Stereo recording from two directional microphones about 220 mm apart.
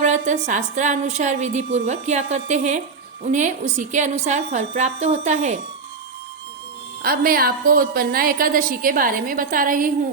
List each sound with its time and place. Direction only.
0.0 s a woman's voice: 35° right (ahead or behind)
7.0 s a woman's voice: 40° right (ahead or behind)